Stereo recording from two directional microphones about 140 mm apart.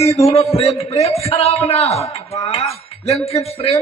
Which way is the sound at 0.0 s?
45° left (ahead or behind).